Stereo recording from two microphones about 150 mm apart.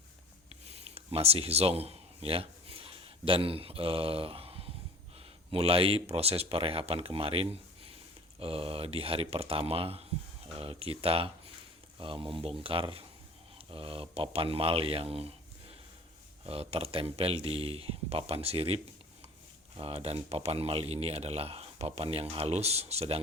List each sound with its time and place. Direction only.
0.7 s a sound: 45° right (ahead or behind)
5.5 s speech: 40° right (ahead or behind)
16.5 s speech: 40° right (ahead or behind)